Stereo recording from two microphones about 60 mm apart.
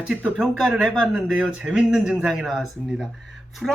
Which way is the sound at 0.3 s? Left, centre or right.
Centre.